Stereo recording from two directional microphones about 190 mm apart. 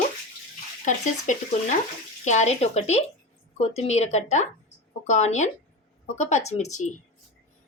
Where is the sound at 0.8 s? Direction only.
40° left (ahead or behind).